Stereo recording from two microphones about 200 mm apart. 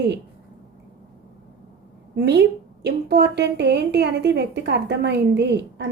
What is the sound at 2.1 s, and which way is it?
A woman's voice, 60° right (ahead or behind).